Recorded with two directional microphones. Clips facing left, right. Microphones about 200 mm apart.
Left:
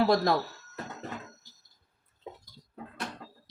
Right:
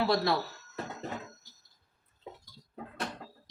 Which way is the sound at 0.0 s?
45° left (ahead or behind).